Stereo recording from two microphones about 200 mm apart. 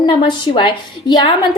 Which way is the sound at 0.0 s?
25° left (ahead or behind).